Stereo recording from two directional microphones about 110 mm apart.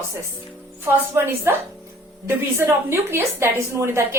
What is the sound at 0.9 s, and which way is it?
A woman's voice, 20° right (ahead or behind).